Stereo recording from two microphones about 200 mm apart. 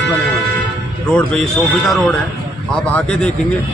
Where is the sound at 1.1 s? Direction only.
5° left (ahead or behind).